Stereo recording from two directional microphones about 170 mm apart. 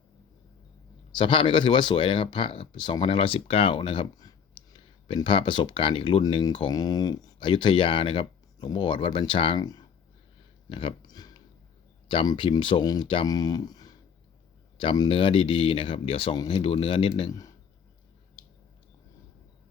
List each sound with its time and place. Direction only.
1.1 s speech: 30° left (ahead or behind)
10.7 s a sound: 30° left (ahead or behind)
12.0 s speech: 25° left (ahead or behind)